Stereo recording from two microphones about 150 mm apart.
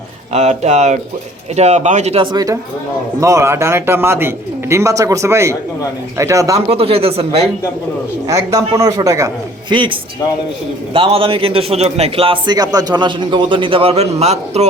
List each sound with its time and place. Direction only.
0.3 s speech: 50° right (ahead or behind)
2.3 s a man's voice: 25° right (ahead or behind)
6.7 s a man's voice: 40° right (ahead or behind)
8.3 s a man's voice: 20° right (ahead or behind); by 14.7 s 45° right (ahead or behind)